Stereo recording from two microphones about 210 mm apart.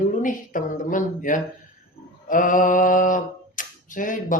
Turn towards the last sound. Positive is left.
turn(degrees=40)  # may be behind; listen again after turning